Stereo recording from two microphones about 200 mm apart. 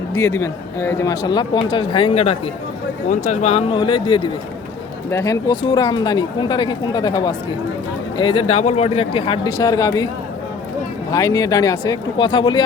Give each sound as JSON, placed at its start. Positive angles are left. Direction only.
{"t": 0.1, "sound": "speech", "side_deg": 15}
{"t": 11.1, "sound": "speech", "side_deg": 15}